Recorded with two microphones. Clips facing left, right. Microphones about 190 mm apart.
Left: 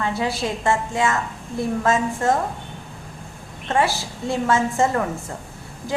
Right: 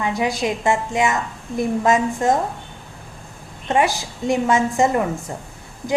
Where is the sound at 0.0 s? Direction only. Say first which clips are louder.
Right 2 dB; 15° right (ahead or behind).